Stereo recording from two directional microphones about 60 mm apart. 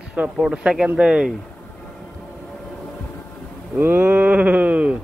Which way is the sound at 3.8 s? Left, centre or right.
Right.